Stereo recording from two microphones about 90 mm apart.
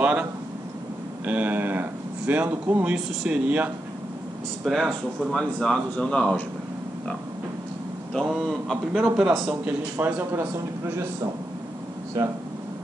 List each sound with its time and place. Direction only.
0.0 s a sound: 15° right (ahead or behind)
1.2 s speech: 15° right (ahead or behind)
4.6 s a man's voice: 5° right (ahead or behind); by 6.4 s 15° left (ahead or behind)
8.1 s a man's voice: 5° left (ahead or behind)
9.0 s a man's voice: 10° right (ahead or behind)